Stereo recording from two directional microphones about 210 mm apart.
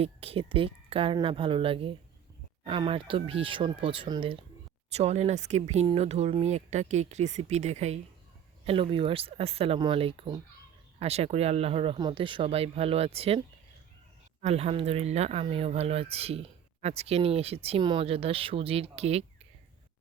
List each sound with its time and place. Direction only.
0.0 s speech: 25° right (ahead or behind)
14.4 s speech: 30° right (ahead or behind)